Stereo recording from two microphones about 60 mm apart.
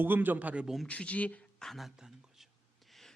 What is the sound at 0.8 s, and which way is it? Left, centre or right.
Speech, left.